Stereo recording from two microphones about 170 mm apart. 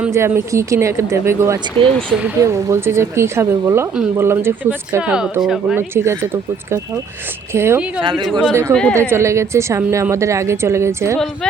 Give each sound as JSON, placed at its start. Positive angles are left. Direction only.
{"t": 0.0, "sound": "a woman's voice", "side_deg": -15}
{"t": 1.8, "sound": "speech", "side_deg": -30}
{"t": 2.2, "sound": "a woman's voice", "side_deg": -20}
{"t": 5.9, "sound": "a woman's voice", "side_deg": -15}
{"t": 8.0, "sound": "speech", "side_deg": -25}
{"t": 8.4, "sound": "a woman's voice", "side_deg": -10}
{"t": 8.7, "sound": "a woman's voice", "side_deg": 5}
{"t": 9.0, "sound": "a woman's voice", "side_deg": -15}